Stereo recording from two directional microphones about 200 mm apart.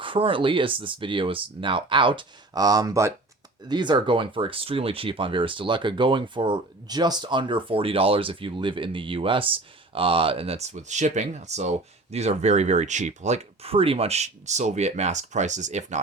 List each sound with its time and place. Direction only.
0.0 s speech: 25° right (ahead or behind)